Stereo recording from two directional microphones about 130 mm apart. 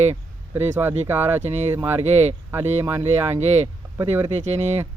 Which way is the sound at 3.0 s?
55° right (ahead or behind).